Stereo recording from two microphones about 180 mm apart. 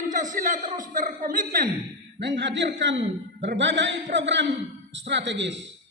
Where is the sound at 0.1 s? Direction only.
45° right (ahead or behind).